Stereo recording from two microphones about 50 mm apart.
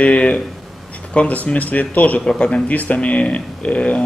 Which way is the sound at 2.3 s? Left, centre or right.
Centre.